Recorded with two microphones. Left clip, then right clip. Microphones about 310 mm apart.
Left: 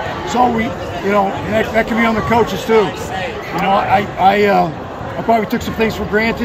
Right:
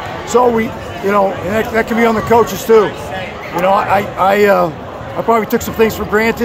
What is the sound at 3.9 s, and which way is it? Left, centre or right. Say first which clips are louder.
Speech: even; centre.